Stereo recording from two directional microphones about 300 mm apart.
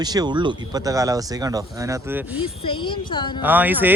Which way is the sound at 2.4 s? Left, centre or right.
Centre.